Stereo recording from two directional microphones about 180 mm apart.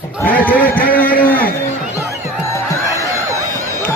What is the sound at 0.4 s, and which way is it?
Speech, 10° left (ahead or behind).